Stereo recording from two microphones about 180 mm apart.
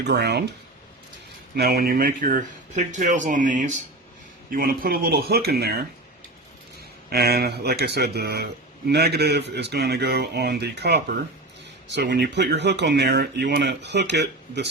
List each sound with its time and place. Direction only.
0.0 s speech: 65° right (ahead or behind)
1.5 s speech: 60° right (ahead or behind)
7.1 s speech: 60° right (ahead or behind)